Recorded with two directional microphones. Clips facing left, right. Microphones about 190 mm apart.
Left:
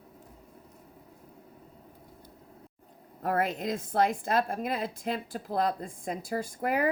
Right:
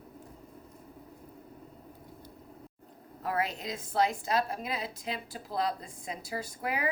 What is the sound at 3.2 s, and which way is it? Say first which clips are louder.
A woman's voice: left 4 dB; 50° left (ahead or behind).